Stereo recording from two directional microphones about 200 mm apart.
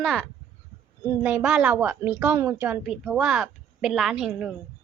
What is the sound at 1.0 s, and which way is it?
A woman's voice, 10° right (ahead or behind).